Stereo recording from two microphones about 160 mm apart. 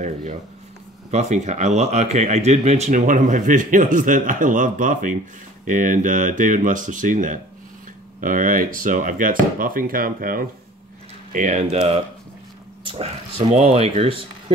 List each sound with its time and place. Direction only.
0.0 s speech: 55° right (ahead or behind)
11.3 s speech: 50° right (ahead or behind)
12.8 s a sound: 35° right (ahead or behind)
13.5 s speech: 40° right (ahead or behind)